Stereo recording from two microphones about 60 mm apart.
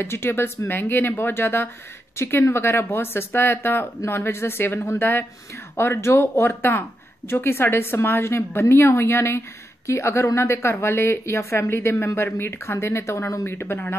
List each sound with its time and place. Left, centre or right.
0.0 s speech: left